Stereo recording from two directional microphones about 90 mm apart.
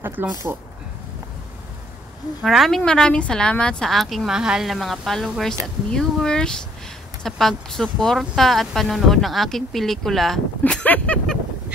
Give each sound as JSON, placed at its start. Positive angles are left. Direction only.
{"t": 0.0, "sound": "speech", "side_deg": -20}
{"t": 2.4, "sound": "speech", "side_deg": 0}
{"t": 10.6, "sound": "speech", "side_deg": 15}